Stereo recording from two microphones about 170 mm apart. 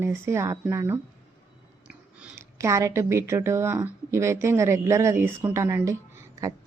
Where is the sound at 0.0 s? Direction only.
15° right (ahead or behind).